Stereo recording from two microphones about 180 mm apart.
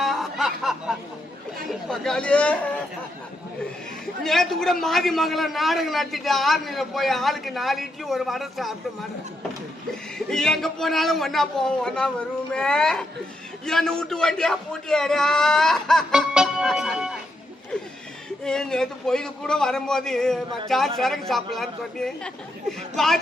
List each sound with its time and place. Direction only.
0.0 s music: centre (ahead or behind)
1.9 s a man's voice: 5° left (ahead or behind)
4.2 s a man's voice: centre (ahead or behind)
10.2 s a man's voice: 5° left (ahead or behind)
18.4 s a man's voice: 5° left (ahead or behind)